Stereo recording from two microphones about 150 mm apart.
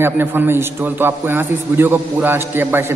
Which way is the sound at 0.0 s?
15° right (ahead or behind).